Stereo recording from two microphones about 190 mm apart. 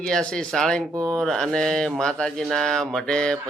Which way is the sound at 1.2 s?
5° left (ahead or behind).